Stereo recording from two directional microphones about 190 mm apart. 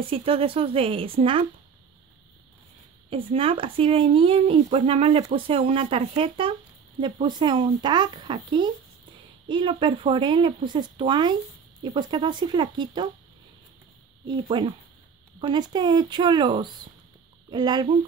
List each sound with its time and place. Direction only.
0.0 s speech: 30° right (ahead or behind)
3.3 s speech: 30° right (ahead or behind)
14.2 s speech: 25° right (ahead or behind)